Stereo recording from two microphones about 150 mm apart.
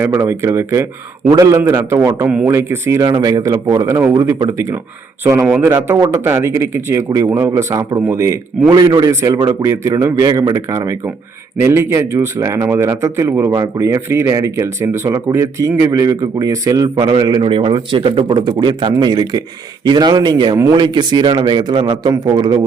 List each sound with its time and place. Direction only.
0.0 s a man's voice: 15° right (ahead or behind)